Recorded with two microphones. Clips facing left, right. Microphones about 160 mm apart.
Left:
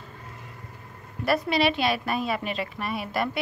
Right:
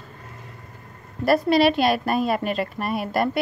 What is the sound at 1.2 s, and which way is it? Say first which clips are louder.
A woman's voice: right 6 dB; 40° right (ahead or behind).